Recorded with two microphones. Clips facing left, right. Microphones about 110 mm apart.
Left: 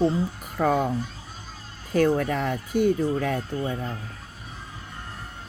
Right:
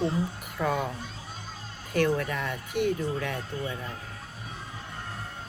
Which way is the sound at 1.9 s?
40° left (ahead or behind).